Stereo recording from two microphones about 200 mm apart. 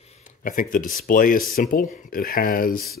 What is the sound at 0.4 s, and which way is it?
Speech, 45° left (ahead or behind).